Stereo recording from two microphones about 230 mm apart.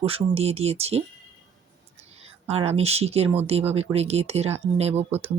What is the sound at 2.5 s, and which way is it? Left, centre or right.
Speech, right.